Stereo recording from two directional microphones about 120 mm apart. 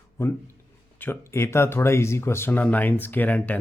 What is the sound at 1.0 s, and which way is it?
Speech, 20° left (ahead or behind).